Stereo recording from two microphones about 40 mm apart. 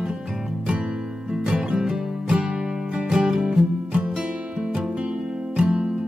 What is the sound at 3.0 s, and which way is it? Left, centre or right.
Music, centre.